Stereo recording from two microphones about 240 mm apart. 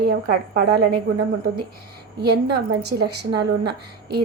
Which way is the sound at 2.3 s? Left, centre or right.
Right.